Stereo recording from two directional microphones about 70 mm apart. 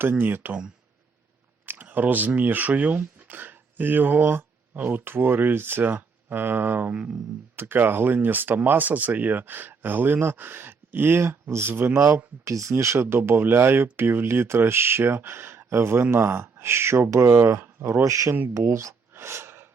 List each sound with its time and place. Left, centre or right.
0.0 s speech: right
1.6 s speech: right
7.5 s speech: right
11.9 s speech: right
18.0 s speech: right